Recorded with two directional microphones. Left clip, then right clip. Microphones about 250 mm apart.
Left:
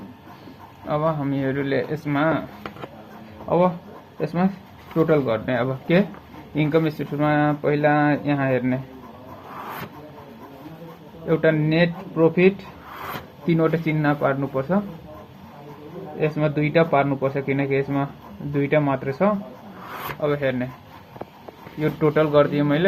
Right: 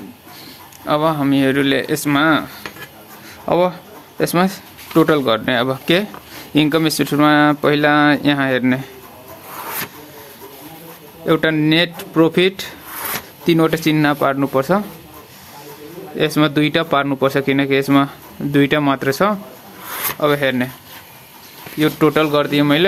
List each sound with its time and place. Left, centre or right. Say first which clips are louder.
0.9 s speech: right 7 dB; right
4.2 s speech: right 8 dB; right
11.3 s speech: right 5 dB; right
16.1 s speech: right 7 dB; right
21.8 s speech: right 5 dB; right